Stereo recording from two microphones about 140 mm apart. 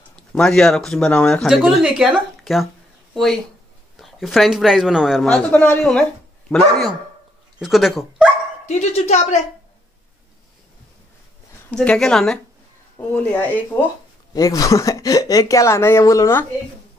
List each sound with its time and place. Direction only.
0.1 s a man's voice: 5° left (ahead or behind)
3.9 s a man's voice: centre (ahead or behind)
7.5 s speech: centre (ahead or behind)
8.6 s speech: 50° left (ahead or behind)
11.7 s a man's voice: 5° left (ahead or behind)
14.3 s speech: 25° left (ahead or behind)